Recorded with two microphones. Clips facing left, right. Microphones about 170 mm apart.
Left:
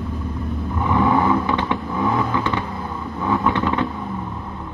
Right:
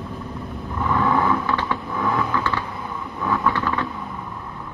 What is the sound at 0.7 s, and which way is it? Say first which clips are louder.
Vehicle: left 2 dB; 15° left (ahead or behind).